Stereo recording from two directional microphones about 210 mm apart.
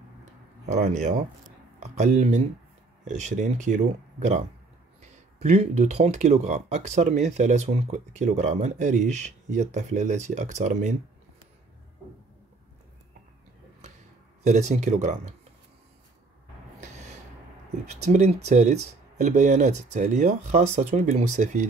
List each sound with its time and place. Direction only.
0.7 s speech: 35° right (ahead or behind)
5.0 s speech: 35° right (ahead or behind)
14.4 s speech: 35° right (ahead or behind)
17.8 s speech: 30° right (ahead or behind)